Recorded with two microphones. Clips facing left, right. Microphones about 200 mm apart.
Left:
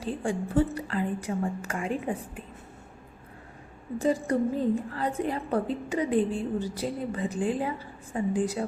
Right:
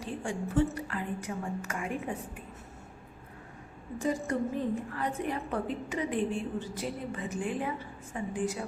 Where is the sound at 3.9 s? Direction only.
35° left (ahead or behind).